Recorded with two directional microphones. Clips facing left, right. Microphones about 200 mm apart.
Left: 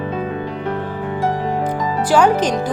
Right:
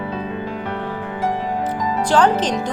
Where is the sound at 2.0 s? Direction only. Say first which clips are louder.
Left 2 dB; 10° left (ahead or behind).